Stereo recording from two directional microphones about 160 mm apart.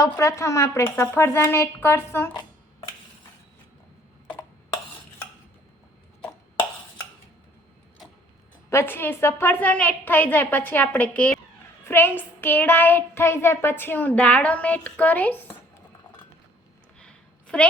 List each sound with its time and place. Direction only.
0.0 s child singing: 20° left (ahead or behind)
8.7 s child singing: 15° left (ahead or behind)
17.0 s a sound: 5° left (ahead or behind)